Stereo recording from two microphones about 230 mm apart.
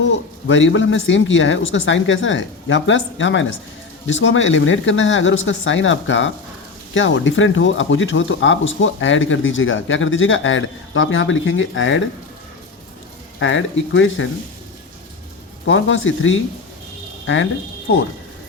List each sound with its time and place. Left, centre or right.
0.4 s speech: left
13.4 s speech: left
15.6 s speech: left